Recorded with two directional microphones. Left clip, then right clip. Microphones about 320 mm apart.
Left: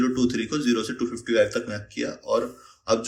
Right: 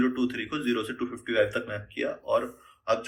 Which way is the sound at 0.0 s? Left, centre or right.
Centre.